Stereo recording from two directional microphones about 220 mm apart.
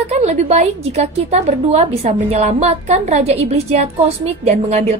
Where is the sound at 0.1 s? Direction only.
30° right (ahead or behind).